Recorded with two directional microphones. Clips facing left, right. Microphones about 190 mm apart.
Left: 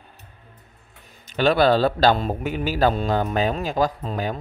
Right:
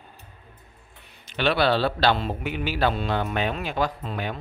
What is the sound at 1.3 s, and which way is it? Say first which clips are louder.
A man's voice: left 5 dB; 40° left (ahead or behind).